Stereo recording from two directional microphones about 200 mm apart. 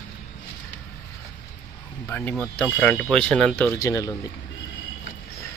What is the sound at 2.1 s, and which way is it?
Speech, 10° left (ahead or behind).